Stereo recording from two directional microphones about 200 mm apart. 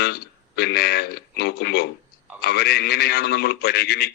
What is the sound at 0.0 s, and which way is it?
A man's voice, 55° left (ahead or behind).